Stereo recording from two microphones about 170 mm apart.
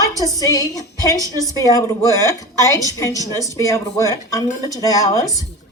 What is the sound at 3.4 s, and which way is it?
A woman's voice, 20° left (ahead or behind).